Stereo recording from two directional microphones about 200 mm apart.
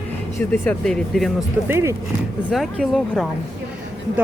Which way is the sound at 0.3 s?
10° left (ahead or behind).